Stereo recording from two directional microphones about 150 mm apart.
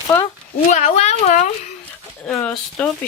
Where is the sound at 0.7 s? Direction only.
50° left (ahead or behind).